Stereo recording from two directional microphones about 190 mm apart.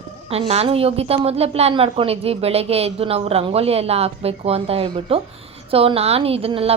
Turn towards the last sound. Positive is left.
turn(degrees=-30)  # may be behind; listen again after turning